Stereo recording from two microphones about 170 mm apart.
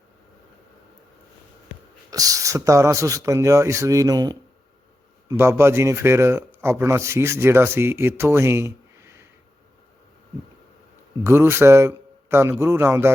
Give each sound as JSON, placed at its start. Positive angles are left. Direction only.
{"t": 2.0, "sound": "speech", "side_deg": -20}
{"t": 11.2, "sound": "speech", "side_deg": -15}